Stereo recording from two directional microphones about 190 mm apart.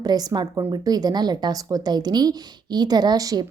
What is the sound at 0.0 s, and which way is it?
A woman's voice, 20° right (ahead or behind).